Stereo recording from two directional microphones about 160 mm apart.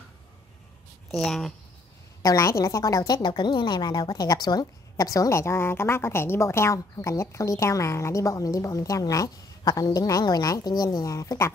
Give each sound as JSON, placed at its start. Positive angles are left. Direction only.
{"t": 1.1, "sound": "speech", "side_deg": 0}
{"t": 2.2, "sound": "a woman's voice", "side_deg": 20}